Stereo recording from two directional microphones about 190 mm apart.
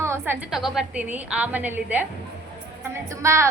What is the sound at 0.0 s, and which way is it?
A woman's voice, 10° right (ahead or behind).